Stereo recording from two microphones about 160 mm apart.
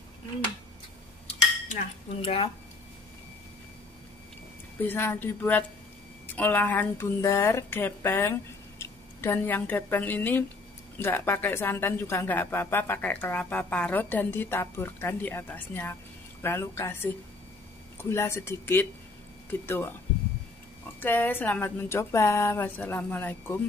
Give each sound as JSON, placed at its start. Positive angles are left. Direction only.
{"t": 1.2, "sound": "dishes", "side_deg": 50}
{"t": 2.2, "sound": "speech", "side_deg": 35}
{"t": 4.8, "sound": "a woman's voice", "side_deg": 15}
{"t": 21.0, "sound": "a woman's voice", "side_deg": 10}